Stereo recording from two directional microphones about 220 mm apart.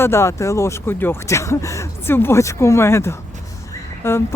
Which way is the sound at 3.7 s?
10° left (ahead or behind).